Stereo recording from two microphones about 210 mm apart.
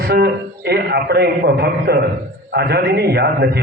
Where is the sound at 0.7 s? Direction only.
50° right (ahead or behind).